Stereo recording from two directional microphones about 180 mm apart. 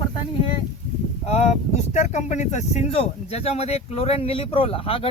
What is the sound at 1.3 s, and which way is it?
Speech, 35° left (ahead or behind).